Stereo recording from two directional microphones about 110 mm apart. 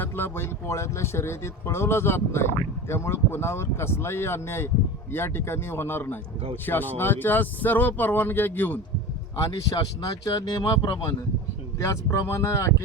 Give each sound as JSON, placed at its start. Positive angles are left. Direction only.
{"t": 0.0, "sound": "speech", "side_deg": 20}
{"t": 9.3, "sound": "speech", "side_deg": 35}
{"t": 11.8, "sound": "speech", "side_deg": 25}